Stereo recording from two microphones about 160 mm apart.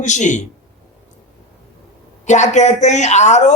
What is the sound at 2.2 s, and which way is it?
A man's voice, 45° left (ahead or behind).